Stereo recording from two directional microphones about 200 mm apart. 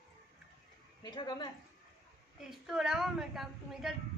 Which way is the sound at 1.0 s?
20° left (ahead or behind).